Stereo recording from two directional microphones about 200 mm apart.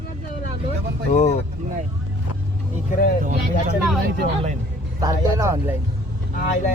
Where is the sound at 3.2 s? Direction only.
45° right (ahead or behind).